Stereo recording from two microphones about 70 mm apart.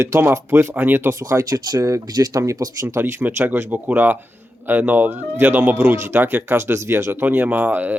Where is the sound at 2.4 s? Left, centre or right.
Right.